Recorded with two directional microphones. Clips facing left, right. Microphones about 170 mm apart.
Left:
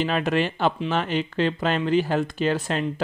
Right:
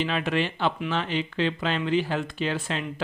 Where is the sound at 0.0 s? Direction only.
40° left (ahead or behind).